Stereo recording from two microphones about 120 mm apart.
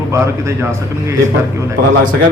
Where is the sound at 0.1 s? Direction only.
25° right (ahead or behind).